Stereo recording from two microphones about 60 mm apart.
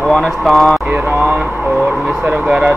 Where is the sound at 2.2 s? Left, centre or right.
Right.